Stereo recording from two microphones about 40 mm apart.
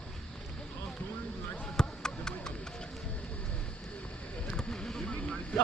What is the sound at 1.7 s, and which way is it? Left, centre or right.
Music, centre.